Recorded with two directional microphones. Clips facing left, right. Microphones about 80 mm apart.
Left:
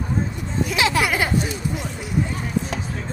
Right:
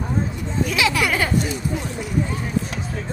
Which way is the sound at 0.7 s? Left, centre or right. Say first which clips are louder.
Left 1 dB; left.